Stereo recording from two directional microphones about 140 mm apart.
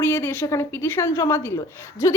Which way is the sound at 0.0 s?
15° left (ahead or behind).